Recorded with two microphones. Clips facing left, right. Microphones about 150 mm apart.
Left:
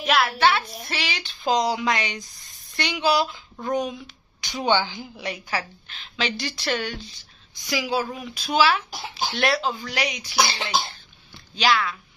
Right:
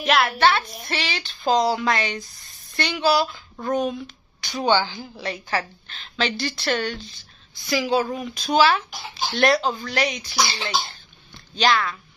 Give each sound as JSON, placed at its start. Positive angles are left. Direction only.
{"t": 0.0, "sound": "a woman's voice", "side_deg": 5}
{"t": 11.3, "sound": "speech", "side_deg": 5}